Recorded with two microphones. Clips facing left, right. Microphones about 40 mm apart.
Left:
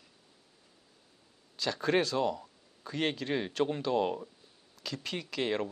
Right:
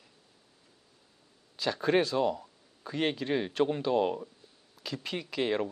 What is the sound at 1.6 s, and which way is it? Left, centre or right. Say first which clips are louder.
Speech: right 2 dB; centre.